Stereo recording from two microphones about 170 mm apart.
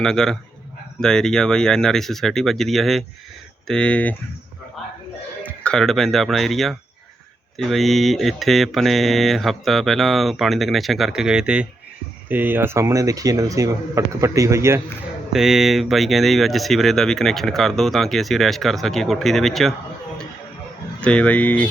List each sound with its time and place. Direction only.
0.0 s speech: 5° left (ahead or behind)
4.8 s a sound: centre (ahead or behind)
5.4 s speech: 5° left (ahead or behind); by 14.8 s 15° right (ahead or behind)
15.3 s speech: 5° right (ahead or behind)
21.0 s speech: 5° left (ahead or behind)